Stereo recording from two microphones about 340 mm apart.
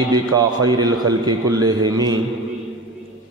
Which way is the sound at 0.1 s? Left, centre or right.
Centre.